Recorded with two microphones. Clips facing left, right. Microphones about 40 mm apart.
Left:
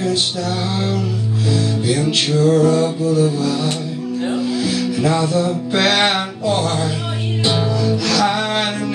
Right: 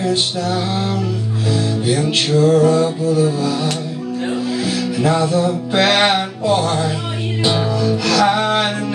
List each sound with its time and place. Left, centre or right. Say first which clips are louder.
0.0 s music: right 1 dB; right
7.8 s music: right 3 dB; right